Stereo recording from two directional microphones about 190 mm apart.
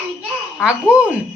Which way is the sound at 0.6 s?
5° right (ahead or behind).